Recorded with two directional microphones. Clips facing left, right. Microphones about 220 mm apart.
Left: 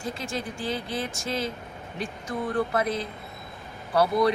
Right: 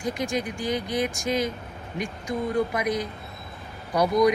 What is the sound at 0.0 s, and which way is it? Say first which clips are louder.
Speech: right 5 dB; 15° right (ahead or behind).